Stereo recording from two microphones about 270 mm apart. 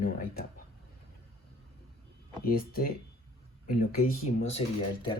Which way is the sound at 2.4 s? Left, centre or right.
Left.